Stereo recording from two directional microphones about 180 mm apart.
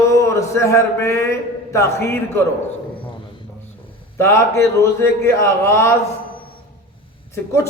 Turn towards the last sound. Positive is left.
turn(degrees=15)  # may be behind; listen again after turning